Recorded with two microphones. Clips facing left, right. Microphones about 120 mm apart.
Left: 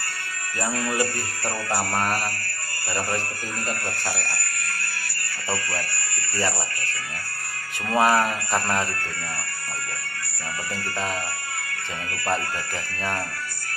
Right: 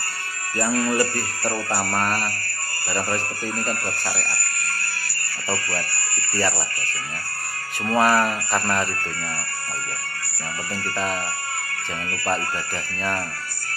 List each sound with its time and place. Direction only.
0.7 s speech: 30° right (ahead or behind)
1.7 s jingle bell: 20° left (ahead or behind)
4.2 s fire alarm: 30° right (ahead or behind)
5.7 s speech: 30° right (ahead or behind)
7.9 s speech: 20° left (ahead or behind)